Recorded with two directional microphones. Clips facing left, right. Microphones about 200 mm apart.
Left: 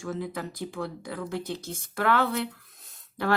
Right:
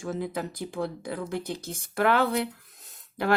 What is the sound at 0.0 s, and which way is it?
Speech, 20° right (ahead or behind).